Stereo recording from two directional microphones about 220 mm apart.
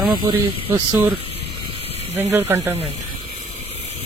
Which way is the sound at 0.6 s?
20° right (ahead or behind).